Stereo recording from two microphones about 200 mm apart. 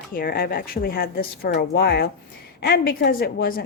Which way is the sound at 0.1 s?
50° left (ahead or behind).